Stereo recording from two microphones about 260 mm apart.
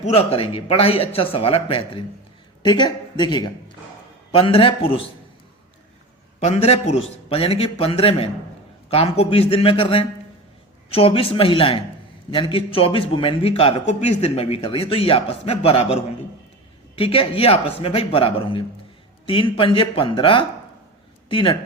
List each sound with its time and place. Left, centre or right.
0.0 s a man's voice: left
6.4 s a man's voice: left